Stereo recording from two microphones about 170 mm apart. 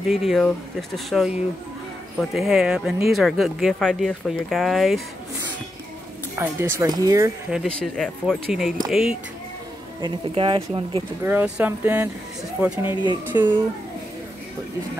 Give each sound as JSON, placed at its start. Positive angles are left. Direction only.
{"t": 0.1, "sound": "speech", "side_deg": 0}
{"t": 6.3, "sound": "speech", "side_deg": -15}
{"t": 7.5, "sound": "speech", "side_deg": 5}
{"t": 10.0, "sound": "speech", "side_deg": -30}
{"t": 11.2, "sound": "speech", "side_deg": -10}
{"t": 12.8, "sound": "speech", "side_deg": 25}
{"t": 13.3, "sound": "speech", "side_deg": -10}